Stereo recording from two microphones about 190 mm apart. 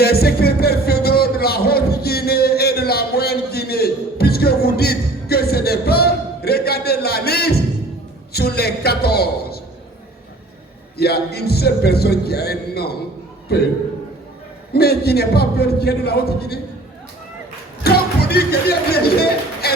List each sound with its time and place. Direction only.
0.0 s music: 55° left (ahead or behind)
8.3 s a sound: 55° left (ahead or behind)
10.9 s a man's voice: 55° left (ahead or behind)
14.7 s a man's voice: 55° left (ahead or behind)
17.8 s speech: 55° left (ahead or behind)